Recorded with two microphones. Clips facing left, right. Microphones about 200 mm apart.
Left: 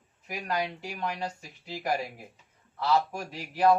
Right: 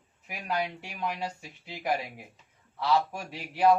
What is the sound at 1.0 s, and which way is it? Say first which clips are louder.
Speech: right 1 dB; 5° right (ahead or behind).